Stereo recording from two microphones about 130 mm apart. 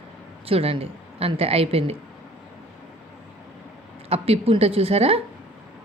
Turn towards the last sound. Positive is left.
turn(degrees=-50)  # may be behind; listen again after turning